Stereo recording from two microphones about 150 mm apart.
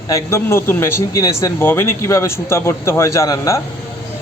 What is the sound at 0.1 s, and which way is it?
A man's voice, 15° left (ahead or behind).